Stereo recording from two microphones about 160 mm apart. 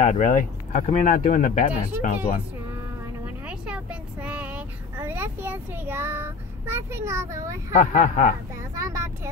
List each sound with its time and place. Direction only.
0.0 s speech: 50° left (ahead or behind)
3.4 s child singing: 10° right (ahead or behind)
7.7 s speech: 50° left (ahead or behind)
8.7 s vehicle: 20° right (ahead or behind)